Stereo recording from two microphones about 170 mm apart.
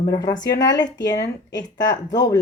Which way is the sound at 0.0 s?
20° left (ahead or behind).